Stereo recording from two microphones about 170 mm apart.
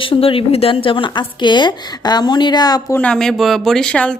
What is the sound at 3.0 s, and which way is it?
A woman's voice, 5° left (ahead or behind).